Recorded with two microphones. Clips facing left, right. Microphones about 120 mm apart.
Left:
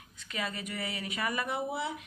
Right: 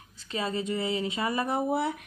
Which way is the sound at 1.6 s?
50° right (ahead or behind).